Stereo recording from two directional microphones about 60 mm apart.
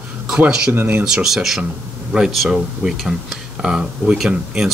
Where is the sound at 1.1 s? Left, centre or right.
Centre.